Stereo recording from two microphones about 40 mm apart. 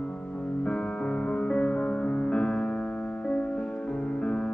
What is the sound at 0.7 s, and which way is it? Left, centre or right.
Music, left.